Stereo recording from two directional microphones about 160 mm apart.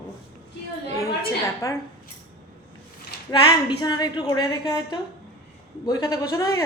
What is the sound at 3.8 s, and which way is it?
A woman's voice, 25° left (ahead or behind).